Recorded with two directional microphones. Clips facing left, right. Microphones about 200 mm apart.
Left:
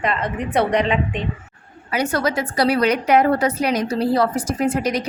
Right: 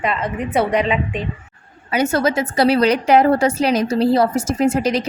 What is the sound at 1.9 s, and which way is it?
A woman's voice, 25° right (ahead or behind).